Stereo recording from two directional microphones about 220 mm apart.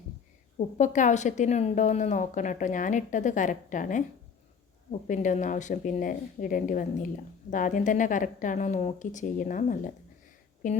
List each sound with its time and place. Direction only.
0.8 s a woman's voice: 35° left (ahead or behind)